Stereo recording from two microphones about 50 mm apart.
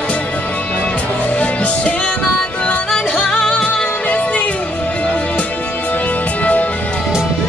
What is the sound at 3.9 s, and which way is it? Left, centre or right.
Music, left.